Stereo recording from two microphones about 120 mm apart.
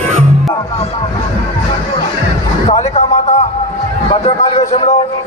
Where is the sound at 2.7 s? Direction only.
70° left (ahead or behind).